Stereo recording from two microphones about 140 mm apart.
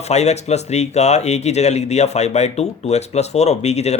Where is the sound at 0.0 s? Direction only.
50° left (ahead or behind).